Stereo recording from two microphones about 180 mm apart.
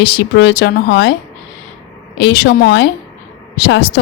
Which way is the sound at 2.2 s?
70° left (ahead or behind).